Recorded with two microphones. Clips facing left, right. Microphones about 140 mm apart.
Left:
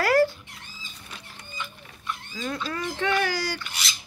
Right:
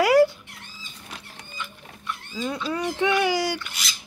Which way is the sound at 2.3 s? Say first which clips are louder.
Right 4 dB; 10° right (ahead or behind).